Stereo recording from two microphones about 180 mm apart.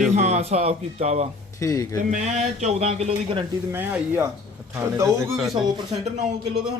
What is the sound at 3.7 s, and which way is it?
Speech, 10° right (ahead or behind).